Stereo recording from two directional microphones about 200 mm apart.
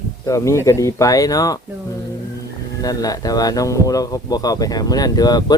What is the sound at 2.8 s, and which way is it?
Speech, 20° left (ahead or behind).